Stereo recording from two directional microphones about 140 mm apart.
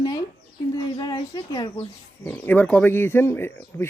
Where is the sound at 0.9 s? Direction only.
30° left (ahead or behind).